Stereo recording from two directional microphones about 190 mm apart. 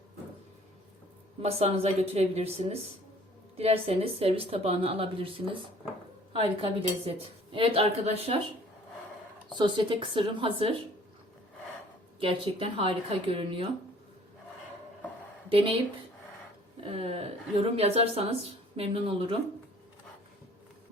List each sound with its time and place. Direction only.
1.4 s a woman's voice: 30° right (ahead or behind)
9.6 s speech: 25° right (ahead or behind)
12.2 s speech: 30° right (ahead or behind)
15.4 s speech: 30° right (ahead or behind)
16.9 s a woman's voice: 30° right (ahead or behind)